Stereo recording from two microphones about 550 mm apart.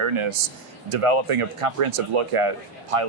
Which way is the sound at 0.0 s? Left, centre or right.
Right.